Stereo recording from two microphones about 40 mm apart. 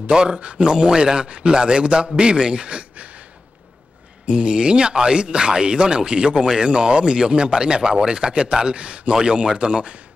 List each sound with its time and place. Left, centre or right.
0.1 s speech: centre
0.4 s speech: right
4.3 s speech: right